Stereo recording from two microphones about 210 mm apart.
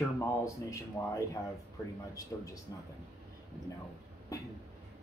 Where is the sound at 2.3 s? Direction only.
15° left (ahead or behind).